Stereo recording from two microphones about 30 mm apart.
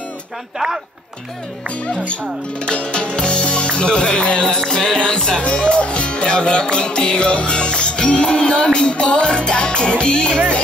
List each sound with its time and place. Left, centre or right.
2.6 s speech: left
4.6 s music: centre
5.4 s speech: left
5.8 s music: left